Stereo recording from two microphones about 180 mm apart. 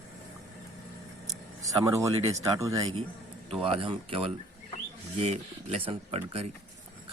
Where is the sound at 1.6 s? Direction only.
20° right (ahead or behind).